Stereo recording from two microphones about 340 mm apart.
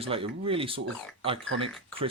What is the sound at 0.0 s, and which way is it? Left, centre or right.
Speech, centre.